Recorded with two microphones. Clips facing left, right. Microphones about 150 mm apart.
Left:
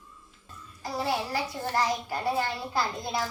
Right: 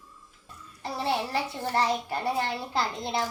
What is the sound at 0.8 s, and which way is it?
A child's voice, 25° right (ahead or behind).